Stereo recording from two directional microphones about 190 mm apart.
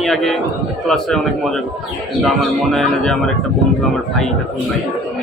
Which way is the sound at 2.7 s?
Centre (ahead or behind).